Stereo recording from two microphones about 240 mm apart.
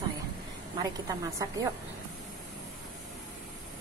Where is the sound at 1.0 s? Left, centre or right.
Centre.